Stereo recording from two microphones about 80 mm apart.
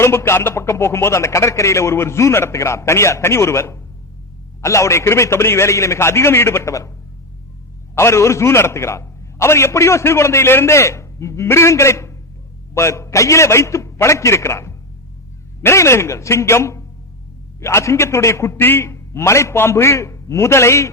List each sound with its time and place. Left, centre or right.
0.0 s a man's voice: left
7.9 s a man's voice: left